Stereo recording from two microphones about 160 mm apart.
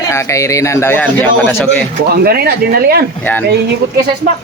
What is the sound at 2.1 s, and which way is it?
Speech, 75° right (ahead or behind).